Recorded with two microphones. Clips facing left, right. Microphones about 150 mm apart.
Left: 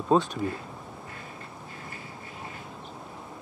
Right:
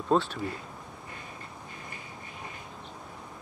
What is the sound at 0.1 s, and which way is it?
Speech, 15° left (ahead or behind).